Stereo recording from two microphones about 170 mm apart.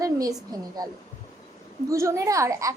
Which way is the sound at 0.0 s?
20° right (ahead or behind).